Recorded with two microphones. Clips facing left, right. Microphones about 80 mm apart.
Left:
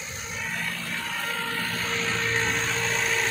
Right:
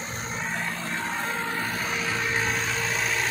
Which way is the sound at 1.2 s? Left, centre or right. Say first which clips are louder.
Right 1 dB; right.